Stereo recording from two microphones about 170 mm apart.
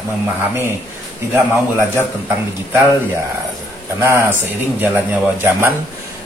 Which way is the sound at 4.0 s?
15° right (ahead or behind).